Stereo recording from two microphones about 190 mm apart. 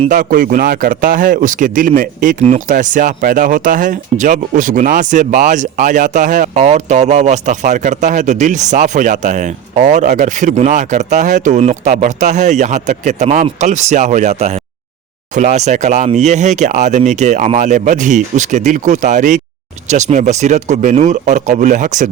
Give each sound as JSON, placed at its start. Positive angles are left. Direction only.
{"t": 0.1, "sound": "speech", "side_deg": -45}